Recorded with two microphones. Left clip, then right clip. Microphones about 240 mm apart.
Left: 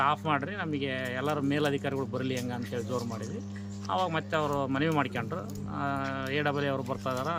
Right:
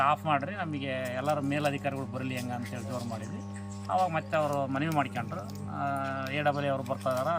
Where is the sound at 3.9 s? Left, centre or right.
Centre.